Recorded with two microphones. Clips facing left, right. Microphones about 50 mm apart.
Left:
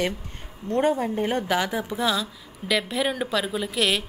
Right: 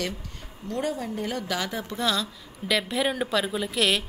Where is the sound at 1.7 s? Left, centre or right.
Centre.